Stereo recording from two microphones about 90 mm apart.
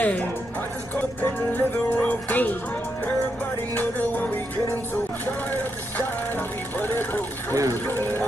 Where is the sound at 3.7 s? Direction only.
15° left (ahead or behind).